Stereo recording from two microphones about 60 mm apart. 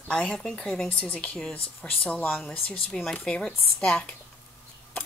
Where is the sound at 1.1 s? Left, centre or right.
Left.